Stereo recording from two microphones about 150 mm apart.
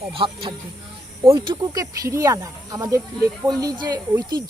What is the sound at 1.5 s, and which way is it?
Speech, 25° right (ahead or behind).